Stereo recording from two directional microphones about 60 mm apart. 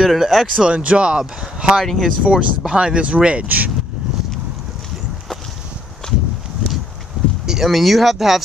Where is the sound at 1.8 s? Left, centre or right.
Centre.